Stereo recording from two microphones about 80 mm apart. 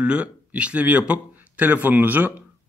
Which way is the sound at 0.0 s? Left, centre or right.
Centre.